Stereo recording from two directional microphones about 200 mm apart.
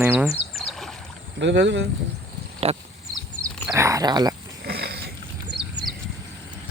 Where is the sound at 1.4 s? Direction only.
60° right (ahead or behind).